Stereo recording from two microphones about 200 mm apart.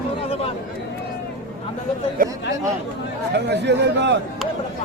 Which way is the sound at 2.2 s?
45° right (ahead or behind).